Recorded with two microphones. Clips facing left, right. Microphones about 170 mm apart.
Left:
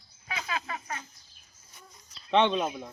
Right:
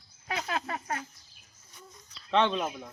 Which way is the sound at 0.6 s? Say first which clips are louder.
Right 3 dB; 45° right (ahead or behind).